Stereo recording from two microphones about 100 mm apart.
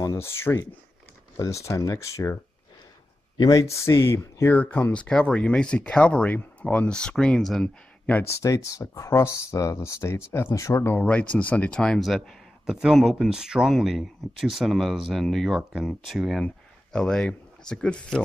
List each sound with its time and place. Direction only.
0.2 s speech: 25° left (ahead or behind)
3.3 s speech: 35° left (ahead or behind); by 7.7 s 5° left (ahead or behind)
8.2 s speech: 30° left (ahead or behind)
11.0 s speech: 15° left (ahead or behind)